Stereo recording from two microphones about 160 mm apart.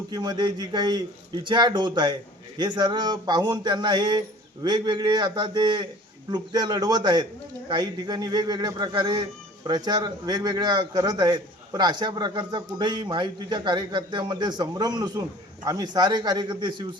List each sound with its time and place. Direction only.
0.1 s a man's voice: 25° right (ahead or behind)